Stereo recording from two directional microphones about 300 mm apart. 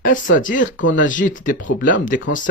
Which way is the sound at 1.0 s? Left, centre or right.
Left.